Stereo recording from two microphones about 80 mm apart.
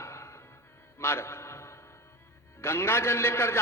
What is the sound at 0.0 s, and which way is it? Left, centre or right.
Music, left.